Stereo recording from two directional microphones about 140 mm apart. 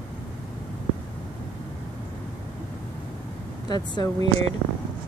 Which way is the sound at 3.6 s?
30° left (ahead or behind).